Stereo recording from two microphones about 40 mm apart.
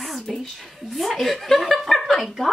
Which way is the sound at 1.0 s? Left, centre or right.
Centre.